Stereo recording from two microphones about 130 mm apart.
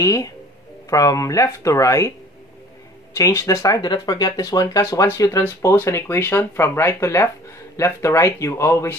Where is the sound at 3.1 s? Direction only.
25° left (ahead or behind).